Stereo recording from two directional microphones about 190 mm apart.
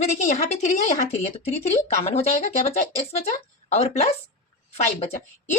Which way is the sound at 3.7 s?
35° left (ahead or behind).